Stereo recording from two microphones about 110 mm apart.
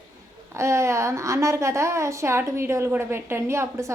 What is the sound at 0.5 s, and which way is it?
A woman's voice, 25° right (ahead or behind).